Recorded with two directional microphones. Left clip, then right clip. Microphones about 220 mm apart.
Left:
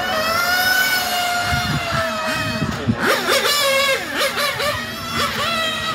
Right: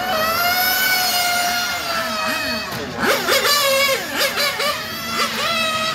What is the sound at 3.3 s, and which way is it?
Wail, 15° left (ahead or behind).